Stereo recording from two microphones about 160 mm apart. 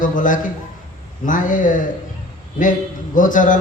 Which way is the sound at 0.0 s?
55° left (ahead or behind).